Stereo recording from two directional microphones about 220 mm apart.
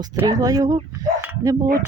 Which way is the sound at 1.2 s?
10° right (ahead or behind).